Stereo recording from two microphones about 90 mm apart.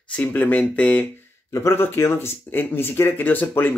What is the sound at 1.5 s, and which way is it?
Speech, 35° left (ahead or behind).